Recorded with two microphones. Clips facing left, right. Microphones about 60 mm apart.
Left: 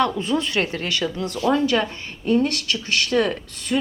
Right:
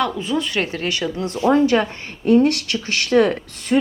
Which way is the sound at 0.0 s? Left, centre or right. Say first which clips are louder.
Left 1 dB; centre.